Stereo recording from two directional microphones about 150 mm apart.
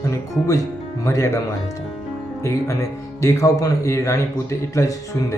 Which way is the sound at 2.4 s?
20° left (ahead or behind).